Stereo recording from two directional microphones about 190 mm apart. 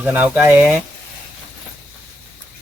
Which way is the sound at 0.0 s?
10° right (ahead or behind).